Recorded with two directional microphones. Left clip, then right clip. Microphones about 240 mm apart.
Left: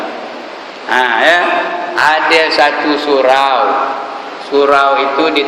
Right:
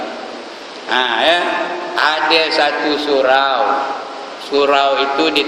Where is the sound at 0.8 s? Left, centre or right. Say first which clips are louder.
Left 4 dB; centre.